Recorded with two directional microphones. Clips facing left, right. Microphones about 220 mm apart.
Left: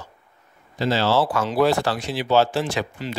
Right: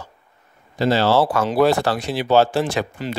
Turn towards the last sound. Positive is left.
turn(degrees=-50)  # may be behind; listen again after turning